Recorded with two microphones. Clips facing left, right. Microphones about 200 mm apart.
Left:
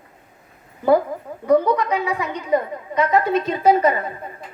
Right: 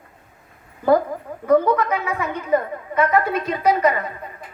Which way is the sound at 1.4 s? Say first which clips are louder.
Even; 15° left (ahead or behind).